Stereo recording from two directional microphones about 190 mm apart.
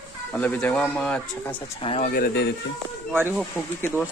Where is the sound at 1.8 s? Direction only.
35° left (ahead or behind).